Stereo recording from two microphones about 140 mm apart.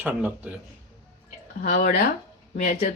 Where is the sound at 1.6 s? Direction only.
65° left (ahead or behind).